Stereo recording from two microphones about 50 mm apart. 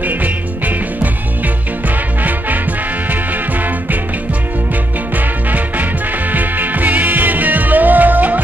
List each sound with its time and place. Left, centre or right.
0.0 s music: right
2.2 s music: right
5.1 s music: right